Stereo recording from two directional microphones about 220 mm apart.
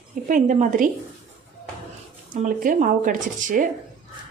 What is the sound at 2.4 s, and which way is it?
Speech, 35° right (ahead or behind).